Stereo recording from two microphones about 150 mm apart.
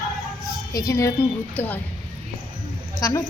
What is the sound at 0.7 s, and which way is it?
A woman's voice, 20° left (ahead or behind).